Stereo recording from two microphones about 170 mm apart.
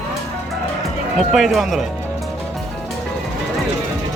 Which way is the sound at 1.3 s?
Centre (ahead or behind).